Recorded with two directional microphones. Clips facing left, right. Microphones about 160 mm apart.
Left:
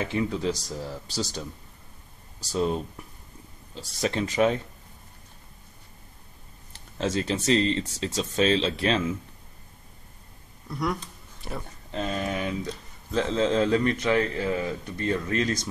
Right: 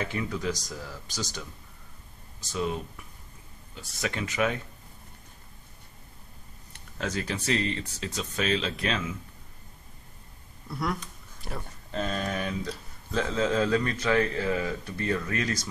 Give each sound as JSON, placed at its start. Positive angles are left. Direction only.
{"t": 0.0, "sound": "speech", "side_deg": 25}
{"t": 2.5, "sound": "speech", "side_deg": 35}
{"t": 6.7, "sound": "speech", "side_deg": 25}
{"t": 10.7, "sound": "speech", "side_deg": 0}
{"t": 11.9, "sound": "speech", "side_deg": 20}